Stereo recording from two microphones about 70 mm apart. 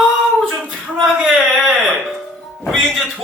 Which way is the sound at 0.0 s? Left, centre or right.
Centre.